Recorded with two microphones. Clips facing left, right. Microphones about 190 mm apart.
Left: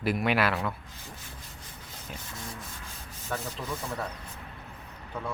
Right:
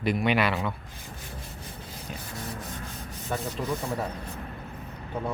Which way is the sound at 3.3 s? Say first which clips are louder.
Right 3 dB; 15° right (ahead or behind).